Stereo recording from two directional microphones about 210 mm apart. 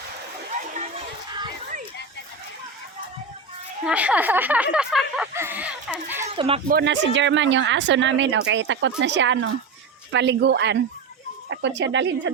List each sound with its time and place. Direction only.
0.5 s a sound: 35° right (ahead or behind)
1.3 s crowd: 20° right (ahead or behind)
3.8 s speech: 5° right (ahead or behind)
6.2 s speech: 25° right (ahead or behind)
6.7 s speech: 50° right (ahead or behind)